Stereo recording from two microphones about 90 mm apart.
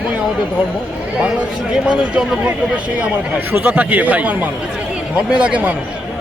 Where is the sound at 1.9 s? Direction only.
15° right (ahead or behind).